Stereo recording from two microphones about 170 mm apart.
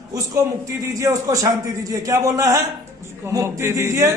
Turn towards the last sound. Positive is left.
turn(degrees=-15)  # may be behind; listen again after turning